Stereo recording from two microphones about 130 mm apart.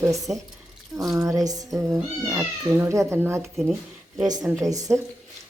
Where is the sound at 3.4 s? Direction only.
Centre (ahead or behind).